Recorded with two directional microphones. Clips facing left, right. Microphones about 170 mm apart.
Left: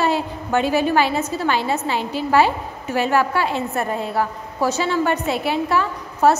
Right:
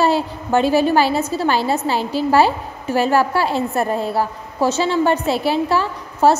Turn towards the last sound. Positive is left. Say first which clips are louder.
# right 2 dB
turn(degrees=-30)  # may be behind; listen again after turning